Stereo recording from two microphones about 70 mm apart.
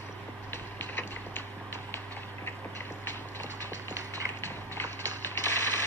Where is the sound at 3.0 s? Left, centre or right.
Left.